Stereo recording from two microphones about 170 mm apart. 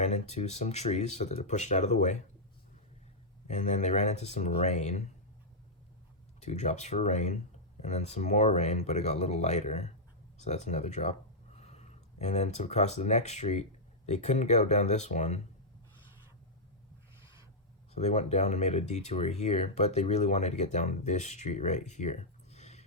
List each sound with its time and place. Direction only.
0.0 s speech: 40° left (ahead or behind)
3.4 s speech: 40° left (ahead or behind)
6.4 s speech: 45° left (ahead or behind)
17.9 s speech: 40° left (ahead or behind)